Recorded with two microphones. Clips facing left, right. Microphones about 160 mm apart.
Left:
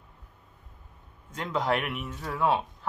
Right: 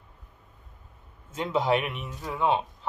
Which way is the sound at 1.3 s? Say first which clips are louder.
Right 4 dB; 25° right (ahead or behind).